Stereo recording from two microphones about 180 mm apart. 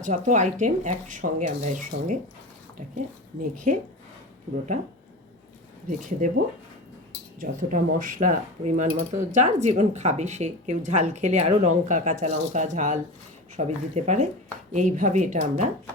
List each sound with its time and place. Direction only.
0.0 s speech: 45° right (ahead or behind)
3.7 s speech: 40° right (ahead or behind)
6.1 s speech: 45° right (ahead or behind)